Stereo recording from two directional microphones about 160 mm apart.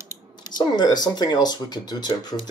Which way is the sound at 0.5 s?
25° left (ahead or behind).